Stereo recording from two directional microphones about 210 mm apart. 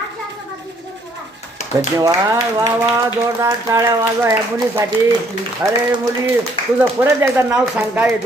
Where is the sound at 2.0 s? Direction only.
15° right (ahead or behind).